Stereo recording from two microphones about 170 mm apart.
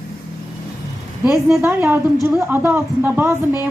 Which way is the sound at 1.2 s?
5° right (ahead or behind).